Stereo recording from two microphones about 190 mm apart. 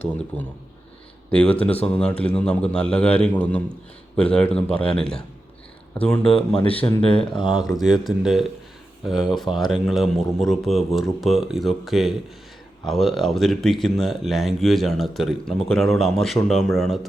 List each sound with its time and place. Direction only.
0.3 s a man's voice: 5° left (ahead or behind)
6.3 s speech: 30° left (ahead or behind)
7.5 s speech: centre (ahead or behind)